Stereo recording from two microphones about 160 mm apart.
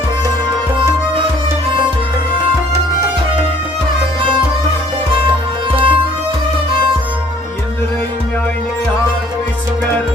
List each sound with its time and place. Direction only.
5.7 s music: 35° right (ahead or behind)